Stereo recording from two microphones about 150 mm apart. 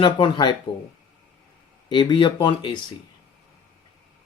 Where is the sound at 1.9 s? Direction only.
30° left (ahead or behind).